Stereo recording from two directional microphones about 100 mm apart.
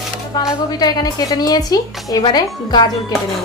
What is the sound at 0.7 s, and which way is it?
A woman's voice, 40° left (ahead or behind).